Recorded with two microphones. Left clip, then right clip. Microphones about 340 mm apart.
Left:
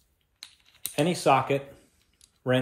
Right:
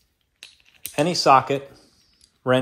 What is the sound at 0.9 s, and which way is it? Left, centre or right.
Speech, centre.